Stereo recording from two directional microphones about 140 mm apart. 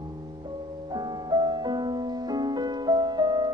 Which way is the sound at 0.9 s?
30° right (ahead or behind).